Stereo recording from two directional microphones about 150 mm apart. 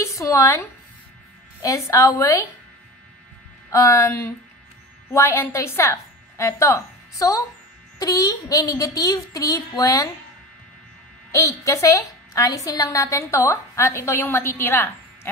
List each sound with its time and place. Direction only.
0.0 s a sound: 20° left (ahead or behind)
1.6 s a woman's voice: 20° left (ahead or behind)
3.7 s a woman's voice: 20° left (ahead or behind)
11.3 s a woman's voice: 20° left (ahead or behind)